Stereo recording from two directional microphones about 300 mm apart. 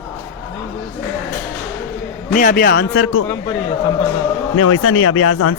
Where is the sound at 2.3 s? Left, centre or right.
Left.